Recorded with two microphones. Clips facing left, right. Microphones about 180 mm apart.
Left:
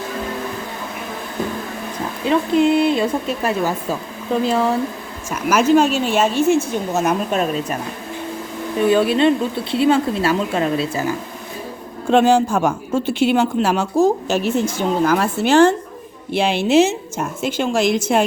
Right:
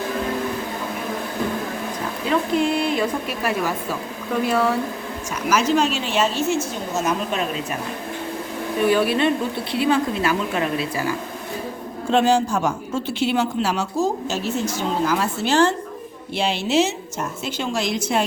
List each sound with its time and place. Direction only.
2.6 s speech: 25° left (ahead or behind)
5.5 s speech: 55° left (ahead or behind)
8.9 s speech: 25° left (ahead or behind)
12.1 s a woman's voice: 55° left (ahead or behind)